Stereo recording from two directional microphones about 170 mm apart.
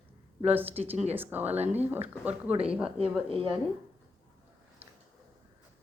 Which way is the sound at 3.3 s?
30° right (ahead or behind).